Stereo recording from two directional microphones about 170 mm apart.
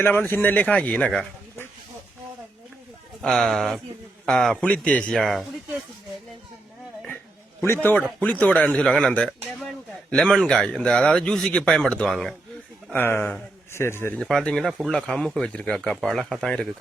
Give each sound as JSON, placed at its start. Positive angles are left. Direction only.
{"t": 0.0, "sound": "a man's voice", "side_deg": 10}
{"t": 3.2, "sound": "a man's voice", "side_deg": 0}
{"t": 7.6, "sound": "a man's voice", "side_deg": 15}
{"t": 14.2, "sound": "a man's voice", "side_deg": 5}